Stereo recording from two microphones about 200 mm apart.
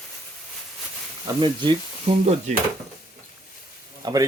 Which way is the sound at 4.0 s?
20° right (ahead or behind).